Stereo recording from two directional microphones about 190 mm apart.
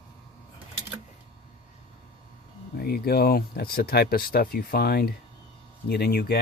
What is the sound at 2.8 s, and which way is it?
Speech, 55° left (ahead or behind).